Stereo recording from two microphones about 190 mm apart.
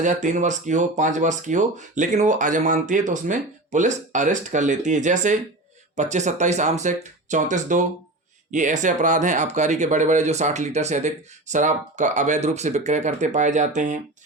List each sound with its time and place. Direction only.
0.0 s speech: 40° right (ahead or behind)